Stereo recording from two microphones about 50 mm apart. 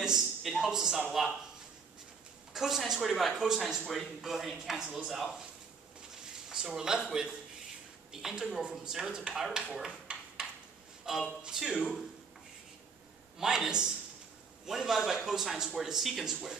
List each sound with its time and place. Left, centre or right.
0.0 s speech: centre
2.5 s speech: centre
3.8 s speech: centre
4.2 s speech: centre
6.5 s speech: centre
9.8 s a sound: right
11.1 s speech: centre
13.4 s speech: centre